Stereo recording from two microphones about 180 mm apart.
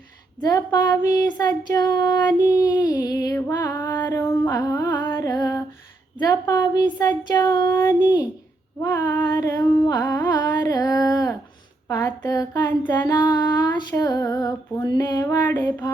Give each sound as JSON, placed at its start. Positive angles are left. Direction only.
{"t": 0.4, "sound": "female singing", "side_deg": 20}
{"t": 4.0, "sound": "music", "side_deg": 15}
{"t": 6.1, "sound": "female singing", "side_deg": 20}